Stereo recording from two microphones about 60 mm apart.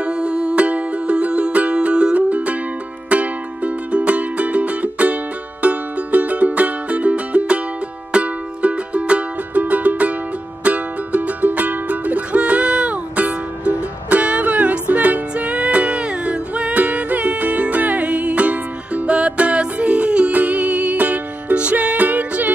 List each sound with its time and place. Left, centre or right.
0.0 s music: centre